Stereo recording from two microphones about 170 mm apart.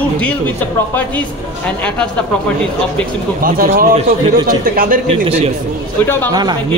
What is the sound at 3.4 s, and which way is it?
A man's voice, 55° right (ahead or behind).